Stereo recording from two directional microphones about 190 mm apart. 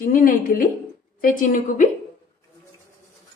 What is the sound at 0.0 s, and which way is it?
A woman's voice, 45° left (ahead or behind).